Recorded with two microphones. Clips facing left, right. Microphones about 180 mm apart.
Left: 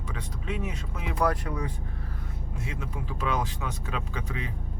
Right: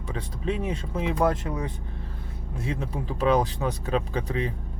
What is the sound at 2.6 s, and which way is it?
Speech, 35° right (ahead or behind).